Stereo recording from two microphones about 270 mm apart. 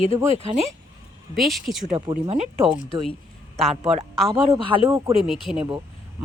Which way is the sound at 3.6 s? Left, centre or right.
Centre.